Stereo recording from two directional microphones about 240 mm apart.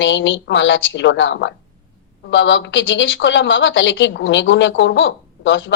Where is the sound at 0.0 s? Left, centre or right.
Left.